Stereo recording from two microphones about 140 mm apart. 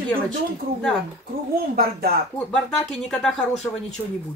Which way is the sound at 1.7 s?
90° right.